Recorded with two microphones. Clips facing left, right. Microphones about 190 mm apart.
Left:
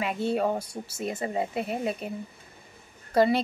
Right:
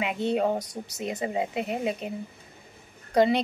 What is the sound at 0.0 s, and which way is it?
Speech, 20° right (ahead or behind).